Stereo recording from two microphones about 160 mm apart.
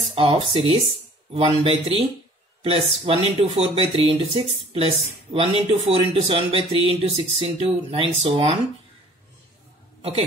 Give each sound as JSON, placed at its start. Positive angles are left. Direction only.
{"t": 0.1, "sound": "speech", "side_deg": -35}